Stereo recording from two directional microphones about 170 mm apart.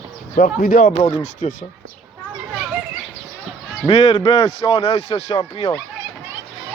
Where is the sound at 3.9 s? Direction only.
40° left (ahead or behind).